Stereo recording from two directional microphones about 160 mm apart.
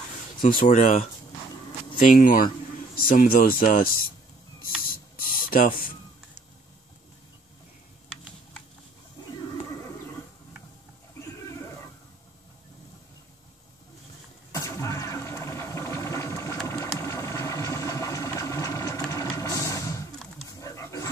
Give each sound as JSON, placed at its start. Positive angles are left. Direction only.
{"t": 0.4, "sound": "speech", "side_deg": 60}
{"t": 2.0, "sound": "speech", "side_deg": 60}
{"t": 4.6, "sound": "spray", "side_deg": 60}
{"t": 14.5, "sound": "engine", "side_deg": 20}
{"t": 19.0, "sound": "printer", "side_deg": 20}
{"t": 20.6, "sound": "dog", "side_deg": 20}